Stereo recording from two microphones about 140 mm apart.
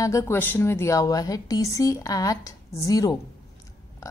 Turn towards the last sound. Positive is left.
turn(degrees=25)  # may be behind; listen again after turning